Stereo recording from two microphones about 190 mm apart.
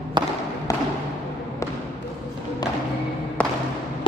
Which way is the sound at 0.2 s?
25° right (ahead or behind).